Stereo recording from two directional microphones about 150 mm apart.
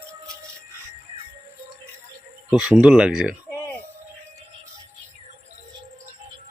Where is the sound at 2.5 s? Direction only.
5° right (ahead or behind).